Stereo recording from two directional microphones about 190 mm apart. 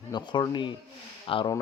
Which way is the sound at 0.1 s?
25° left (ahead or behind).